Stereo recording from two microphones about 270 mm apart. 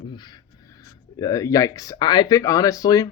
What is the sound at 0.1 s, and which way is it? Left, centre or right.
Speech, centre.